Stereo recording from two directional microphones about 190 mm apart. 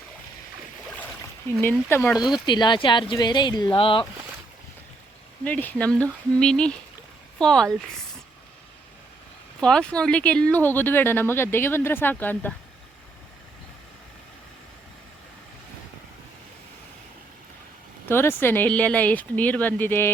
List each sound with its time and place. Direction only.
1.6 s speech: 10° left (ahead or behind)
2.5 s speech: 25° left (ahead or behind)
5.5 s speech: 10° left (ahead or behind)
9.6 s speech: 5° left (ahead or behind)
18.1 s speech: 10° left (ahead or behind)